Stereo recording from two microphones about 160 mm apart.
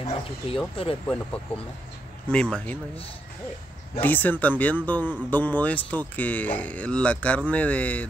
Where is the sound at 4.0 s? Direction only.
10° left (ahead or behind).